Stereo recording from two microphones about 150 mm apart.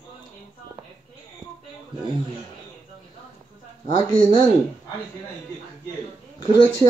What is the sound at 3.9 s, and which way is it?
Speech, 30° left (ahead or behind).